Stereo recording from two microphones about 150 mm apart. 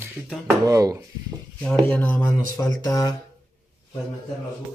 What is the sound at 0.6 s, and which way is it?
Speech, 20° right (ahead or behind).